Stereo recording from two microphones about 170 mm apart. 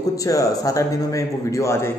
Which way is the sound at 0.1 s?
20° left (ahead or behind).